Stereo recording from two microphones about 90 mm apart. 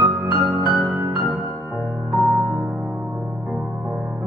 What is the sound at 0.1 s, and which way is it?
Music, 55° right (ahead or behind).